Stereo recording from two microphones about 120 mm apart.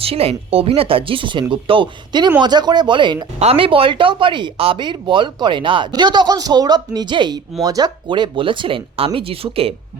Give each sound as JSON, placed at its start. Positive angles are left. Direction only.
{"t": 0.0, "sound": "speech", "side_deg": -55}
{"t": 3.3, "sound": "speech", "side_deg": -55}